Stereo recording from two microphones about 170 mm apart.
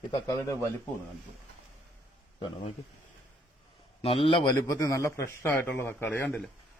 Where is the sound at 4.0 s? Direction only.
35° left (ahead or behind); by 6.4 s 10° left (ahead or behind).